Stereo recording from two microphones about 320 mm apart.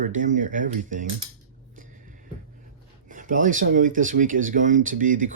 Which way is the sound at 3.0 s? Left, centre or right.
Right.